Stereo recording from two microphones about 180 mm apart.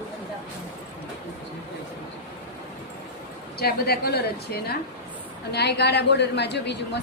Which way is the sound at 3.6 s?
60° left (ahead or behind).